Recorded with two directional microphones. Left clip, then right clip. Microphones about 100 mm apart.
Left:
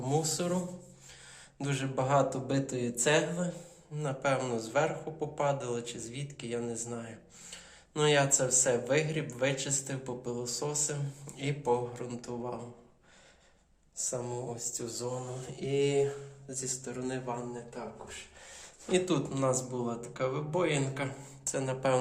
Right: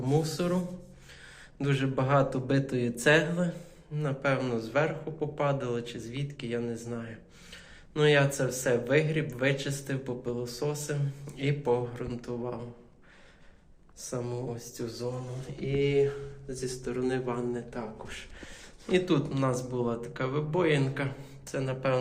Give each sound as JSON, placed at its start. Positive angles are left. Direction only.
{"t": 0.0, "sound": "speech", "side_deg": 30}
{"t": 4.0, "sound": "speech", "side_deg": 35}
{"t": 14.0, "sound": "speech", "side_deg": 30}
{"t": 15.0, "sound": "mantra", "side_deg": 65}
{"t": 16.5, "sound": "speech", "side_deg": 20}
{"t": 18.9, "sound": "speech", "side_deg": 40}
{"t": 21.4, "sound": "mantra", "side_deg": 60}